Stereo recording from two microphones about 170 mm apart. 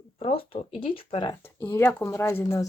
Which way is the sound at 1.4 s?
15° left (ahead or behind).